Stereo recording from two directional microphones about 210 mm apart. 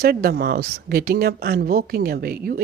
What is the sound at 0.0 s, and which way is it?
Speech, 45° right (ahead or behind).